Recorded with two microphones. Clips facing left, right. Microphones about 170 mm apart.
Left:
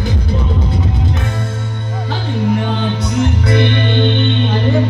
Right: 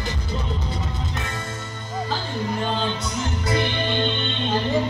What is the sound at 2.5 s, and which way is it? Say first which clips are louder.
Music: left 7 dB; 70° left (ahead or behind).